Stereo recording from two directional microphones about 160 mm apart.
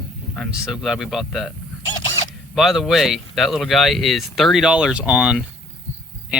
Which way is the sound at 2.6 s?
Centre (ahead or behind).